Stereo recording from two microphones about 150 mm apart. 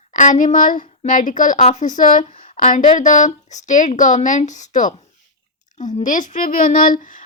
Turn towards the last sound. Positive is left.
turn(degrees=60)  # may be behind; listen again after turning